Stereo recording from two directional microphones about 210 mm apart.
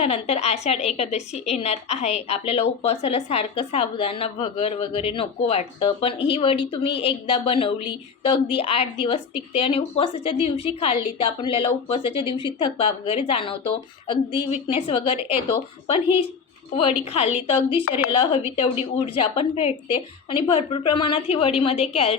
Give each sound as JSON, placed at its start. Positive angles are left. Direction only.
{"t": 0.0, "sound": "a woman's voice", "side_deg": 30}